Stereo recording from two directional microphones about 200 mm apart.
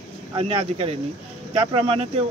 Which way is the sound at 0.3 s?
30° right (ahead or behind).